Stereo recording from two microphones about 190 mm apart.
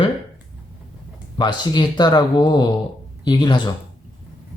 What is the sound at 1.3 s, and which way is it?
Speech, 20° left (ahead or behind).